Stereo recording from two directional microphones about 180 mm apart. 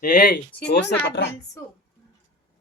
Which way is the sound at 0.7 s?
65° left (ahead or behind).